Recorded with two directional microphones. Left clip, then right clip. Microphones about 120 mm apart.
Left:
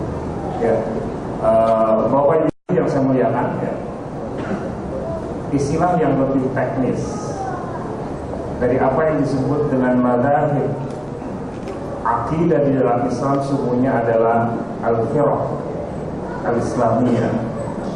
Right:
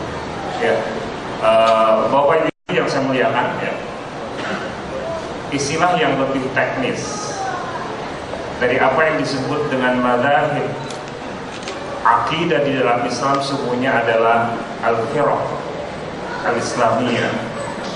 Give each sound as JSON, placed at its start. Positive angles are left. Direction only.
{"t": 1.4, "sound": "a man's voice", "side_deg": -30}
{"t": 5.5, "sound": "a man's voice", "side_deg": -25}
{"t": 8.6, "sound": "a man's voice", "side_deg": -30}
{"t": 12.0, "sound": "a man's voice", "side_deg": -30}
{"t": 16.5, "sound": "a man's voice", "side_deg": -25}